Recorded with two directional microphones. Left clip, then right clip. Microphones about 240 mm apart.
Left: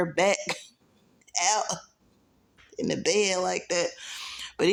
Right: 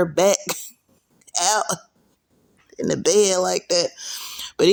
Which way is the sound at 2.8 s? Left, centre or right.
Right.